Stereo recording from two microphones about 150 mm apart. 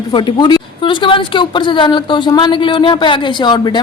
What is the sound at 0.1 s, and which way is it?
A woman's voice, 30° left (ahead or behind).